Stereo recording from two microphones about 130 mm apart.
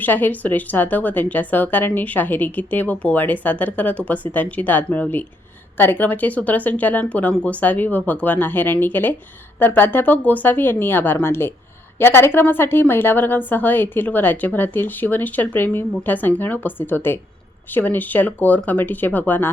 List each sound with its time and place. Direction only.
0.0 s a woman's voice: 15° left (ahead or behind)